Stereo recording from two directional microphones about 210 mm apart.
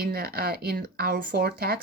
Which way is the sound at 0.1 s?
50° right (ahead or behind).